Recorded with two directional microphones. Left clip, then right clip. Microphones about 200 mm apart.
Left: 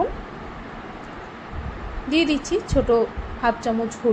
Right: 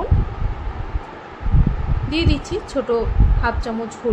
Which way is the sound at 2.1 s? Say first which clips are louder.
Left 2 dB; 5° left (ahead or behind).